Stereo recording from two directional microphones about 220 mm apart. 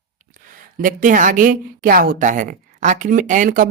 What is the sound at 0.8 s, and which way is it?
A woman's voice, 40° right (ahead or behind).